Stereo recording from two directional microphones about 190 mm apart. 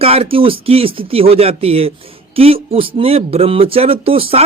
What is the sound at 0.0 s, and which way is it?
Speech, 30° right (ahead or behind).